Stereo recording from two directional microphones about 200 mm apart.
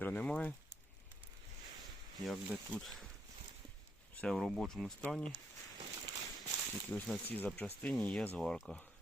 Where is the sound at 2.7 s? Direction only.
Centre (ahead or behind).